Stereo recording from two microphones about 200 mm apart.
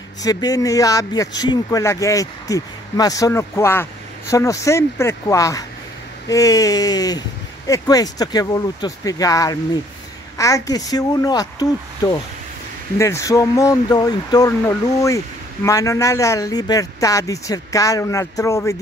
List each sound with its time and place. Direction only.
0.2 s speech: 20° left (ahead or behind)